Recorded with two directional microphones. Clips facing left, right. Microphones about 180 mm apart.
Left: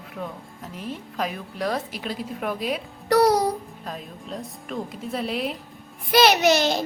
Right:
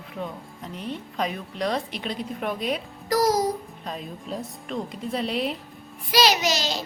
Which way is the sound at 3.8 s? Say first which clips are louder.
Right 4 dB; centre (ahead or behind).